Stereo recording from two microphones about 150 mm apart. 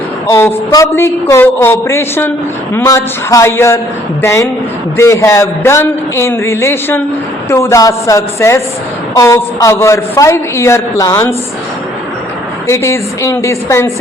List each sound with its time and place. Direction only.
0.3 s a woman's voice: 20° left (ahead or behind)
12.6 s a woman's voice: 20° left (ahead or behind)